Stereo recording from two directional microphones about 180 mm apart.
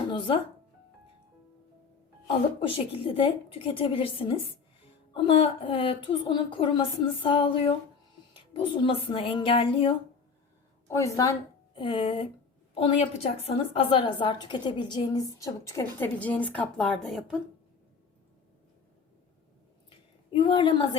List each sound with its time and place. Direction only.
0.1 s music: 25° left (ahead or behind)
2.6 s a woman's voice: 30° left (ahead or behind)
8.8 s a woman's voice: 30° left (ahead or behind)
10.8 s a woman's voice: 15° left (ahead or behind)
11.7 s a woman's voice: 25° left (ahead or behind); by 17.4 s centre (ahead or behind)
20.3 s a woman's voice: 30° left (ahead or behind)